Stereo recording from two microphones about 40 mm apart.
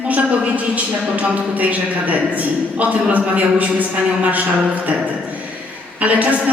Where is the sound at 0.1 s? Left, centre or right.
Right.